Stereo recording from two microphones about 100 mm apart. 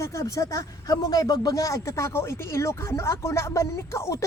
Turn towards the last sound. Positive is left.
turn(degrees=30)  # may be behind; listen again after turning